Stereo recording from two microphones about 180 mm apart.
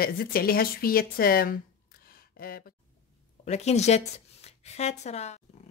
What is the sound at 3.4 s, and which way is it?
Speech, 40° left (ahead or behind).